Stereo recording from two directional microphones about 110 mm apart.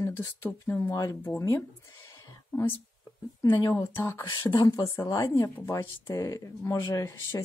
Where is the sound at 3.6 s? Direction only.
30° left (ahead or behind).